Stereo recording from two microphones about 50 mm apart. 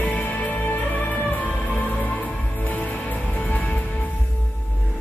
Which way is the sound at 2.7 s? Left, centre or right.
Left.